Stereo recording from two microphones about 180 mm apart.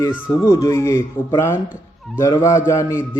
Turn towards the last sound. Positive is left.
turn(degrees=15)  # may be behind; listen again after turning